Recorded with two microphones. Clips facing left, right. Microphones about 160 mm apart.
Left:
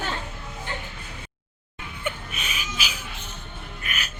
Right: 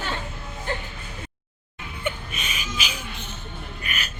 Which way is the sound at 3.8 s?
5° left (ahead or behind).